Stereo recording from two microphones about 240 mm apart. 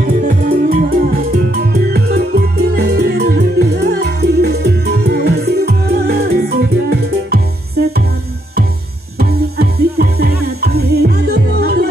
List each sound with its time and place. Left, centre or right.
0.0 s music: right
9.2 s music: right